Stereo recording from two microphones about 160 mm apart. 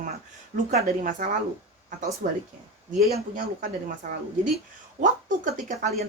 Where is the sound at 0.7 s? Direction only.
45° right (ahead or behind).